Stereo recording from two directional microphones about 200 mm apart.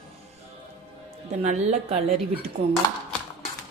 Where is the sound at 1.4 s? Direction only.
35° right (ahead or behind).